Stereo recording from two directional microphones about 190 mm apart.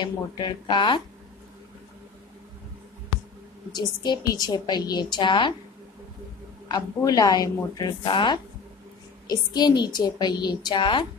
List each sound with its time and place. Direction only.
0.0 s a woman's voice: 25° left (ahead or behind)
3.7 s a woman's voice: 20° left (ahead or behind)
6.7 s a woman's voice: 20° left (ahead or behind)